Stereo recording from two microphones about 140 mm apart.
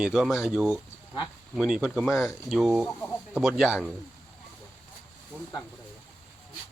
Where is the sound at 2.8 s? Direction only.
10° left (ahead or behind).